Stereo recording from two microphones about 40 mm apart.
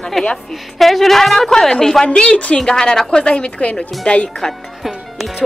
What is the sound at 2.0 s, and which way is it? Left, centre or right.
Speech, left.